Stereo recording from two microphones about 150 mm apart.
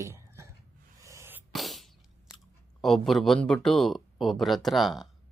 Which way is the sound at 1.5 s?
Centre (ahead or behind).